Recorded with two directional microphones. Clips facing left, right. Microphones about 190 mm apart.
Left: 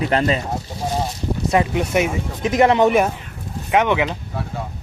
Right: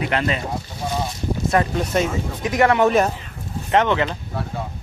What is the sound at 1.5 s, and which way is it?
Speech, 10° left (ahead or behind).